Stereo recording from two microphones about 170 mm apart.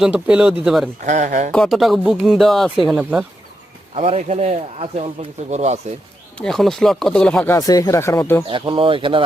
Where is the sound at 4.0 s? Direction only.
35° right (ahead or behind).